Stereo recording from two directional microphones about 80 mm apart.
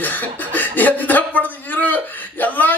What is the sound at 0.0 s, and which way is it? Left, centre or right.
A man's voice, left.